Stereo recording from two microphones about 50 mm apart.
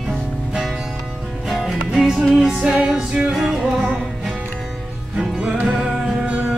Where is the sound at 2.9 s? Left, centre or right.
Centre.